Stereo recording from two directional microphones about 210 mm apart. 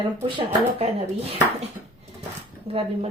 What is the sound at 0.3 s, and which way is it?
Speech, 25° right (ahead or behind).